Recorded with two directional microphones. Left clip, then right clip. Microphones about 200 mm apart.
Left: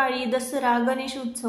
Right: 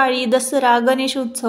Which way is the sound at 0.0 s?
40° right (ahead or behind).